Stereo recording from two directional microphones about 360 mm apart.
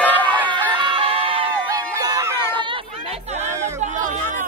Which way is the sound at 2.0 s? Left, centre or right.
Centre.